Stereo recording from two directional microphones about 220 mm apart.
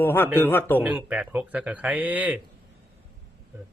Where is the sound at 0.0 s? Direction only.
10° left (ahead or behind).